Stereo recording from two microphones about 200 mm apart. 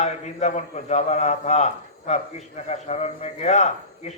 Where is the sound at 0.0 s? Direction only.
35° left (ahead or behind).